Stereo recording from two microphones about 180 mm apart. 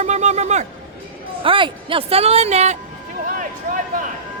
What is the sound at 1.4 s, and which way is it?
Speech, 30° right (ahead or behind).